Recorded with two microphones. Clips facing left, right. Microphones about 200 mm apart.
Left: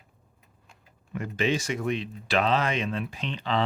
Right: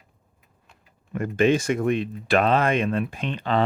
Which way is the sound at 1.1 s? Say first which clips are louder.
Right 7 dB; 50° right (ahead or behind).